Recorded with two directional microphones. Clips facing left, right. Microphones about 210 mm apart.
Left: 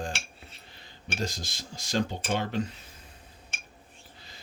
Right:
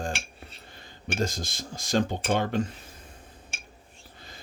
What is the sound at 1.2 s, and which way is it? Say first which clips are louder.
Speech: right 4 dB; 50° right (ahead or behind).